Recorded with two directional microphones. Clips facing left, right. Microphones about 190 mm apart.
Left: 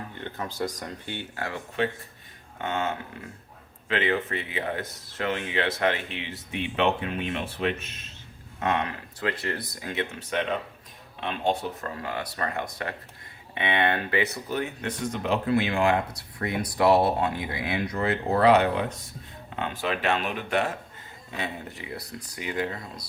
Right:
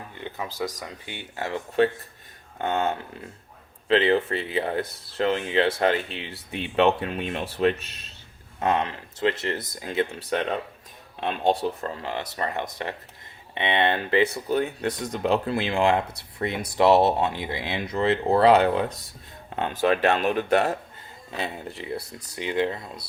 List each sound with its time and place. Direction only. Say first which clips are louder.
0.1 s speech: right 1 dB; 10° right (ahead or behind)
3.8 s speech: right 6 dB; 30° right (ahead or behind)
11.8 s speech: right 2 dB; 25° right (ahead or behind)